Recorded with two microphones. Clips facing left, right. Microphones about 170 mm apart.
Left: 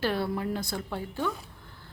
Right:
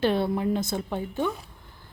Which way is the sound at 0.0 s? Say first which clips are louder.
Right 5 dB; 20° right (ahead or behind).